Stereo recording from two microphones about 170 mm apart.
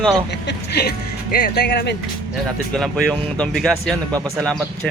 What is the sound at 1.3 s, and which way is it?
Speech, 70° left (ahead or behind).